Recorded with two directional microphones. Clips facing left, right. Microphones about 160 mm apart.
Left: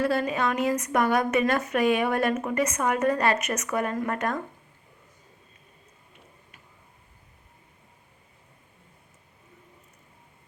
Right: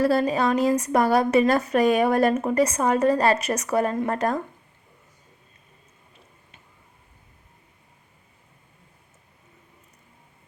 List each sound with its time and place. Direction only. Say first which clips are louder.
0.0 s a woman's voice: right 4 dB; 35° right (ahead or behind)